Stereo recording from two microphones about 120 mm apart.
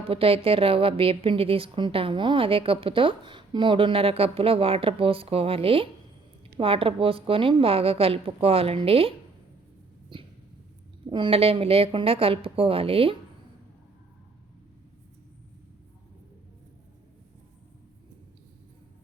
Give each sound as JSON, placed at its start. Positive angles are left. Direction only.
{"t": 0.1, "sound": "a woman's voice", "side_deg": -50}
{"t": 10.1, "sound": "a sound", "side_deg": -45}
{"t": 11.0, "sound": "a woman's voice", "side_deg": -45}